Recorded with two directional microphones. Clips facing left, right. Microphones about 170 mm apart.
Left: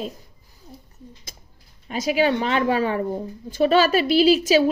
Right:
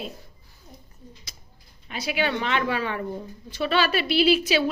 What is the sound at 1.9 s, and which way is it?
A woman's voice, 40° left (ahead or behind).